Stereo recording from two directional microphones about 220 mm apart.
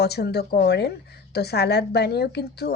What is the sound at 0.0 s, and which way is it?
A woman's voice, 45° left (ahead or behind).